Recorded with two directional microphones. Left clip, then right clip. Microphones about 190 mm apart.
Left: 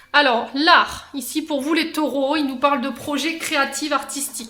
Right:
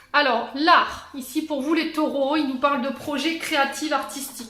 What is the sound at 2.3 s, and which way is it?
A woman's voice, 30° left (ahead or behind).